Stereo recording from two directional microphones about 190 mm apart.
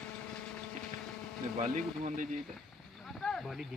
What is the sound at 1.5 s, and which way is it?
Speech, 40° right (ahead or behind).